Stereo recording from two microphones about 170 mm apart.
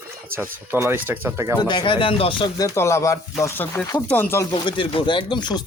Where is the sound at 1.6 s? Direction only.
25° left (ahead or behind).